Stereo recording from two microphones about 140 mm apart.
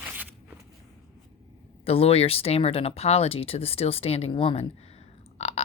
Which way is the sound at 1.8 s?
45° left (ahead or behind).